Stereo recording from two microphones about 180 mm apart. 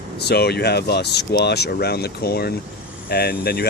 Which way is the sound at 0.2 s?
65° left (ahead or behind).